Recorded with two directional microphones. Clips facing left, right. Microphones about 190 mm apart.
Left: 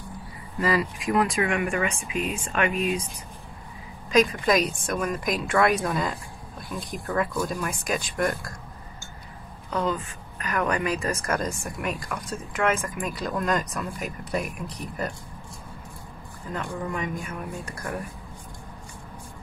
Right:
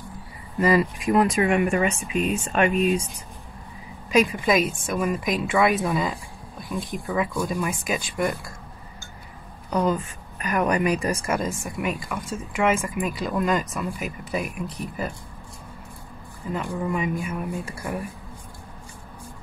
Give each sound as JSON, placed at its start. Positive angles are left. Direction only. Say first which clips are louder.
{"t": 0.6, "sound": "speech", "louder": "right 5 dB", "side_deg": -20}
{"t": 4.1, "sound": "speech", "louder": "right 1 dB", "side_deg": -10}
{"t": 9.7, "sound": "speech", "louder": "right 4 dB", "side_deg": -20}
{"t": 16.5, "sound": "speech", "louder": "right 4 dB", "side_deg": -5}